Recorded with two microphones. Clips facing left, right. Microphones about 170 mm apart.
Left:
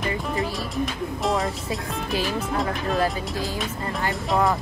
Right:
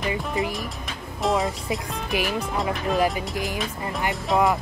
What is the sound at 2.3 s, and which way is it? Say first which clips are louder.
Speech: even; centre (ahead or behind).